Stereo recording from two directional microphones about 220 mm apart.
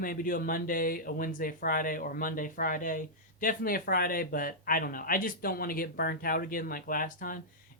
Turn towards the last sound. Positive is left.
turn(degrees=40)  # may be behind; listen again after turning